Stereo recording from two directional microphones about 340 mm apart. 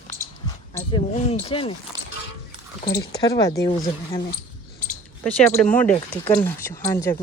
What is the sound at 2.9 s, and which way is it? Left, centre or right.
Speech, centre.